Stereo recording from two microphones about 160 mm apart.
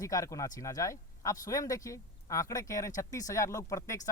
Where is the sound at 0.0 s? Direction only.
20° left (ahead or behind).